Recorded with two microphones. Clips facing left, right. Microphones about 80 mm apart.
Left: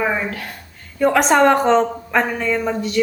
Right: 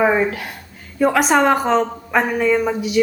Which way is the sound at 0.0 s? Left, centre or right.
Centre.